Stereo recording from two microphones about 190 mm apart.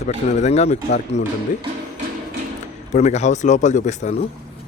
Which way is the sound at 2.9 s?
35° left (ahead or behind).